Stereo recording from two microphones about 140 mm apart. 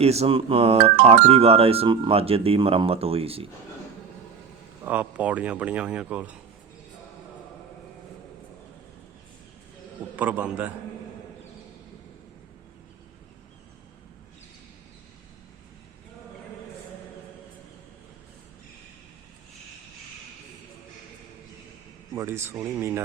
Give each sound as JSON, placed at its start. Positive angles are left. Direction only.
{"t": 0.0, "sound": "speech", "side_deg": -50}
{"t": 4.9, "sound": "speech", "side_deg": -10}
{"t": 10.2, "sound": "speech", "side_deg": -10}
{"t": 22.1, "sound": "a man's voice", "side_deg": -20}